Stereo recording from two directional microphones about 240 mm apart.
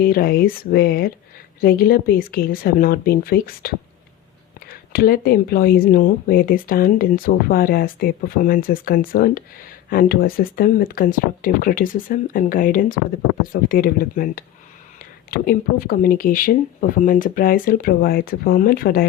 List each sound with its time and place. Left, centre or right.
0.0 s speech: left
4.7 s speech: left